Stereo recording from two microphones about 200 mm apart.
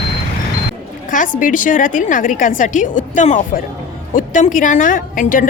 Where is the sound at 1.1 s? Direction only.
40° left (ahead or behind).